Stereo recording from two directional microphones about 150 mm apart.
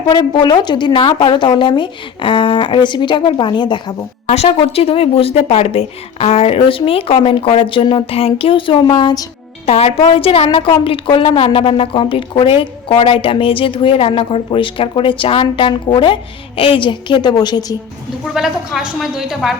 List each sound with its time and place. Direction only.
0.1 s a woman's voice: 30° left (ahead or behind)
4.3 s a woman's voice: 40° left (ahead or behind); by 9.2 s 25° left (ahead or behind)
9.6 s a woman's voice: 45° left (ahead or behind); by 17.7 s 25° left (ahead or behind)
18.3 s a woman's voice: 5° right (ahead or behind)